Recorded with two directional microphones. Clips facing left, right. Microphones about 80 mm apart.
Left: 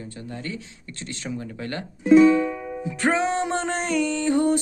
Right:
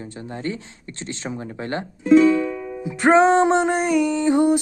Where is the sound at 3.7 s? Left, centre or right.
Centre.